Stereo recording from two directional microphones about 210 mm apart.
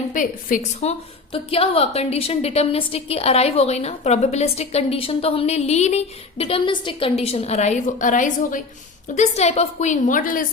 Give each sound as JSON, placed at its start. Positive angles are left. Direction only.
{"t": 0.1, "sound": "a woman's voice", "side_deg": 40}